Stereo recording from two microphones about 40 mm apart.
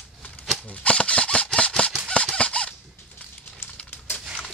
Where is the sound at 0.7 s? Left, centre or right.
Left.